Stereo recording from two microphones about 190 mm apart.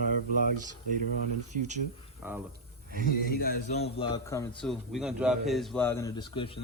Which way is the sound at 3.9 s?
25° left (ahead or behind).